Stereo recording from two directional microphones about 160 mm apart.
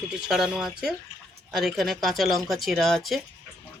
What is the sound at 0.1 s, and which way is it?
Speech, 5° right (ahead or behind).